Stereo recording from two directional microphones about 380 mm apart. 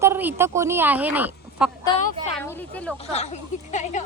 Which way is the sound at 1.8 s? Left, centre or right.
Centre.